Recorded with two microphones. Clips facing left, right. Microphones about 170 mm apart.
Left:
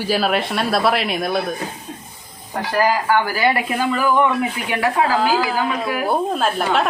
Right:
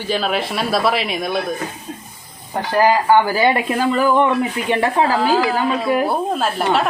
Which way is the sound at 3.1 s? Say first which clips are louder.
Right 4 dB; 25° right (ahead or behind).